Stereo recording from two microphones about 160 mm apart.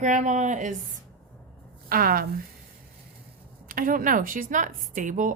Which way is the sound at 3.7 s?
60° right (ahead or behind).